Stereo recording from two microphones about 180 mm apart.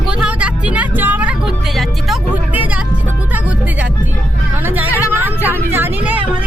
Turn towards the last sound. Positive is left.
turn(degrees=-10)  # may be behind; listen again after turning